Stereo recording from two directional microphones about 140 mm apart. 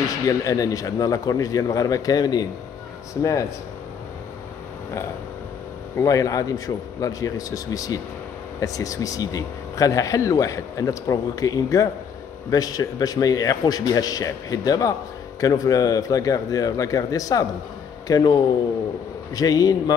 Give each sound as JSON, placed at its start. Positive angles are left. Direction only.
{"t": 0.3, "sound": "speech", "side_deg": 25}
{"t": 5.9, "sound": "speech", "side_deg": 25}
{"t": 19.3, "sound": "speech", "side_deg": 25}